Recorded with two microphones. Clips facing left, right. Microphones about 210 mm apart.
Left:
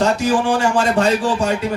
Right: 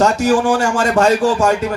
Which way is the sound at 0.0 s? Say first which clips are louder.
Right 3 dB; 45° right (ahead or behind).